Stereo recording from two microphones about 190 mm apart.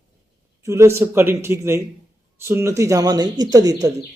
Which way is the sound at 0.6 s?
15° right (ahead or behind).